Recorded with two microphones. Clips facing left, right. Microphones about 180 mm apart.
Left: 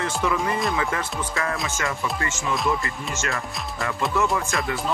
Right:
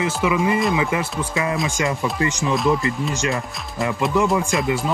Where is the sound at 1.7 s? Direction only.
20° right (ahead or behind).